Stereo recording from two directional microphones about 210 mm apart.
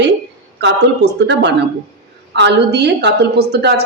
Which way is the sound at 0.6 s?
55° right (ahead or behind).